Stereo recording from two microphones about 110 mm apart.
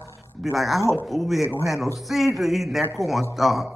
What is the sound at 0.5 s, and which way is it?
A woman's voice, centre (ahead or behind).